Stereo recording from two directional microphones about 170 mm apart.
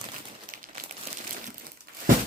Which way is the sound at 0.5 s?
50° right (ahead or behind).